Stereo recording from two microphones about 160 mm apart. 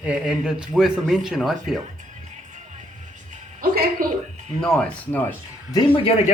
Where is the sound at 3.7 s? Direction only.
70° right (ahead or behind).